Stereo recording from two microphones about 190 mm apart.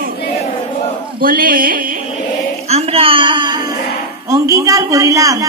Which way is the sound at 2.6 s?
35° right (ahead or behind).